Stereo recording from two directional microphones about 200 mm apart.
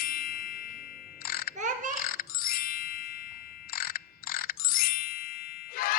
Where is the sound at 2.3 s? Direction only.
45° left (ahead or behind).